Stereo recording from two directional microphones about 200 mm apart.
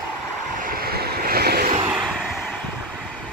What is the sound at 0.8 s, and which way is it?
Vehicle, 50° right (ahead or behind).